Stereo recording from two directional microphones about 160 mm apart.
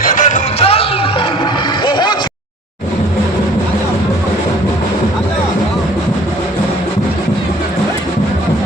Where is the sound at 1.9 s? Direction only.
25° left (ahead or behind).